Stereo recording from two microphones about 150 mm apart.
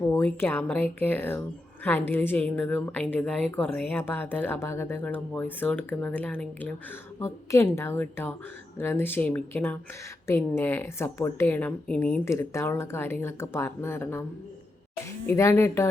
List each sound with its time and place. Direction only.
0.1 s a woman's voice: 15° left (ahead or behind)
15.3 s a woman's voice: 15° left (ahead or behind)